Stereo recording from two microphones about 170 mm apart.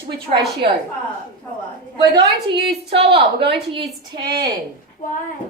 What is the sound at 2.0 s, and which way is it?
A woman's voice, 25° right (ahead or behind).